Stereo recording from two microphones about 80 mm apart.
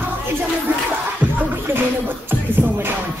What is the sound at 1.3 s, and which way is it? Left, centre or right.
Music, right.